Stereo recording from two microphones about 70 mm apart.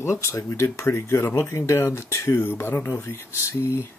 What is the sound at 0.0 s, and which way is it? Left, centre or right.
Speech, left.